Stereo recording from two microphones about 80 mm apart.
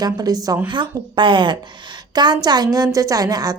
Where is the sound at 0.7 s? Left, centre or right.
Right.